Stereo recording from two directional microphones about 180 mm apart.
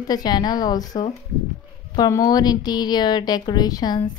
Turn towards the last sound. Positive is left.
turn(degrees=25)  # may be behind; listen again after turning